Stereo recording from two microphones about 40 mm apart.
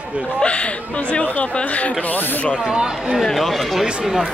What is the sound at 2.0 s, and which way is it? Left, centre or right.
Speech, left.